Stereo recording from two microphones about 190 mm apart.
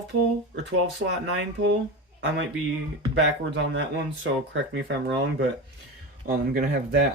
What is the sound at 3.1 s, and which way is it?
Speech, 65° right (ahead or behind).